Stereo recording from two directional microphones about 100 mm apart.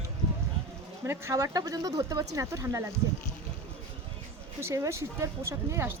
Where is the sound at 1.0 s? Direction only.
25° right (ahead or behind).